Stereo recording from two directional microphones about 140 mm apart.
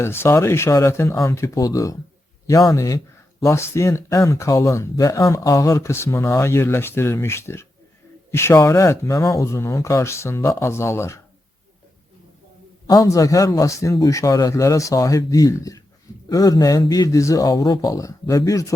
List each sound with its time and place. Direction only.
0.0 s speech: 15° left (ahead or behind)
12.9 s speech: 25° left (ahead or behind)